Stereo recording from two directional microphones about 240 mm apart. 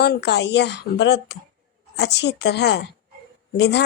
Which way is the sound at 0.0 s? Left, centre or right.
Left.